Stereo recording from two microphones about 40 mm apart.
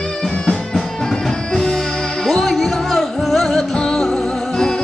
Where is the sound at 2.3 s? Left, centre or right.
Centre.